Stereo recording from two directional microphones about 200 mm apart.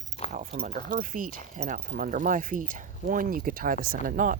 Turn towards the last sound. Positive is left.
turn(degrees=-45)  # may be behind; listen again after turning